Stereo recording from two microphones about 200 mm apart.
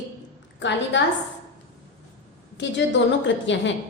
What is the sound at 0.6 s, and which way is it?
Speech, 65° left (ahead or behind).